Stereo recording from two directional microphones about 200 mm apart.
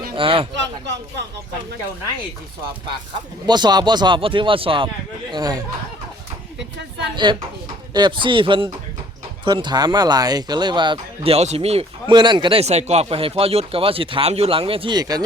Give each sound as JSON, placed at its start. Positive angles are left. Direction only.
{"t": 0.2, "sound": "speech", "side_deg": -25}
{"t": 0.5, "sound": "speech", "side_deg": -60}
{"t": 3.4, "sound": "speech", "side_deg": -20}
{"t": 7.3, "sound": "speech", "side_deg": -25}